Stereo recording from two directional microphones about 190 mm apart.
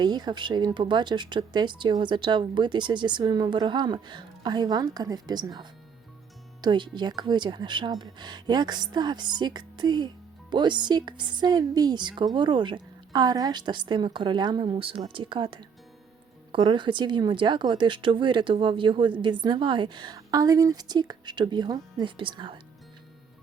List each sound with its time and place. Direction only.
0.0 s speech: 20° right (ahead or behind)